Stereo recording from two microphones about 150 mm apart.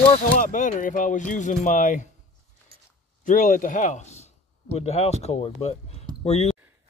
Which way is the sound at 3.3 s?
65° left (ahead or behind).